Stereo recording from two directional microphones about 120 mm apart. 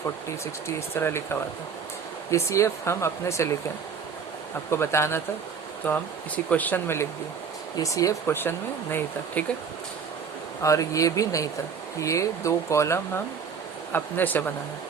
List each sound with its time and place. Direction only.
0.9 s speech: 20° left (ahead or behind)
4.7 s speech: 20° left (ahead or behind)
10.6 s speech: 25° left (ahead or behind)